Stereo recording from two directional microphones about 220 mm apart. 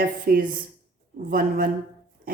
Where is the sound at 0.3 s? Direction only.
40° right (ahead or behind).